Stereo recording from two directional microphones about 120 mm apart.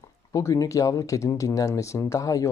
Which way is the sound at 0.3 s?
25° left (ahead or behind).